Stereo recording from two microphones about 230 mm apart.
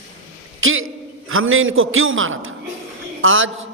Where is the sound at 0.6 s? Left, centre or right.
Right.